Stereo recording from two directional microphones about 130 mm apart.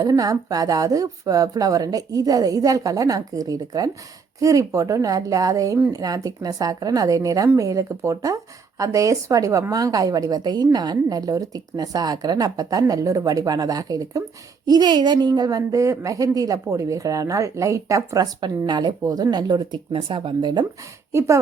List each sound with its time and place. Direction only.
0.0 s a woman's voice: 25° right (ahead or behind)
21.1 s speech: 20° right (ahead or behind)